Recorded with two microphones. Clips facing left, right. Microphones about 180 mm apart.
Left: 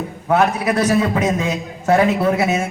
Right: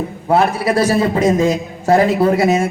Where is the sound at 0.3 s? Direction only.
30° right (ahead or behind).